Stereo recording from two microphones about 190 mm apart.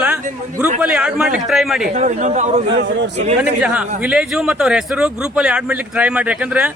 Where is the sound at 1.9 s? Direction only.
35° right (ahead or behind).